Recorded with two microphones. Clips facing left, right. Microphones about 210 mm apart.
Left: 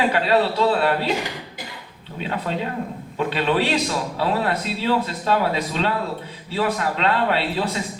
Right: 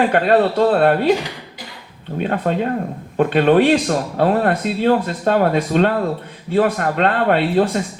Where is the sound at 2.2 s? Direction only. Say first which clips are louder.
Right 7 dB; 50° right (ahead or behind).